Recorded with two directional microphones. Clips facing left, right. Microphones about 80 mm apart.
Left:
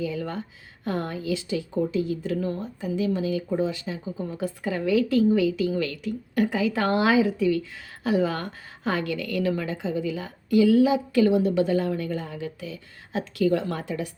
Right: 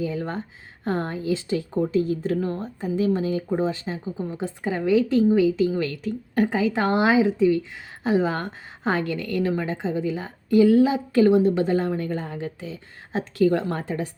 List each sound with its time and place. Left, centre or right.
0.0 s a woman's voice: right